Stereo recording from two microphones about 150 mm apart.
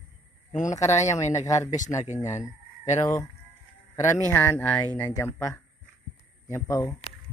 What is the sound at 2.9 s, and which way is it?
Speech, 20° left (ahead or behind).